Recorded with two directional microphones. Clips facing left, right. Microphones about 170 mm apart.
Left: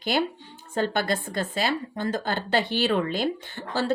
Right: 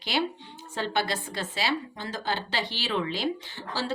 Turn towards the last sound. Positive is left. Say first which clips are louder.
# left 5 dB
turn(degrees=55)  # may be behind; listen again after turning